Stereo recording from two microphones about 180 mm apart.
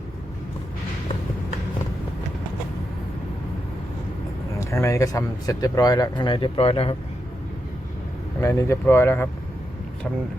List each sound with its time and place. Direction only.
4.6 s speech: 15° left (ahead or behind); by 6.9 s 30° left (ahead or behind)
8.4 s speech: 15° left (ahead or behind)